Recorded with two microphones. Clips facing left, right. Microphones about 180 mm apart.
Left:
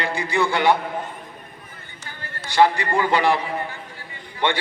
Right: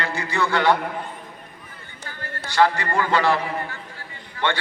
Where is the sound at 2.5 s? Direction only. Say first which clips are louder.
Left 2 dB; 15° left (ahead or behind).